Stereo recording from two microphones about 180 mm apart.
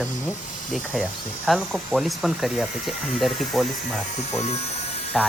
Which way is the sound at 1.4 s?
Centre (ahead or behind).